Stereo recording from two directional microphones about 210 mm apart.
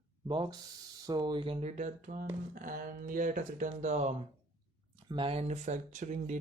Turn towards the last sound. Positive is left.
turn(degrees=-35)  # may be behind; listen again after turning